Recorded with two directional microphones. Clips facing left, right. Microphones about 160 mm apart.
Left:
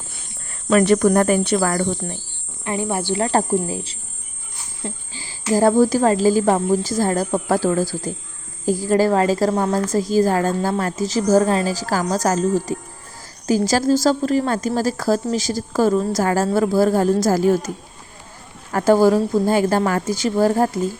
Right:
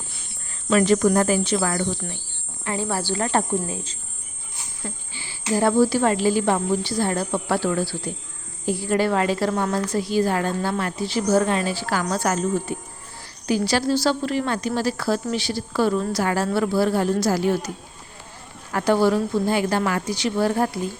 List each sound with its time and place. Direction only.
0.7 s speech: 55° left (ahead or behind)
2.6 s a woman's voice: 20° left (ahead or behind); by 17.7 s 45° left (ahead or behind)
18.7 s a woman's voice: 40° left (ahead or behind)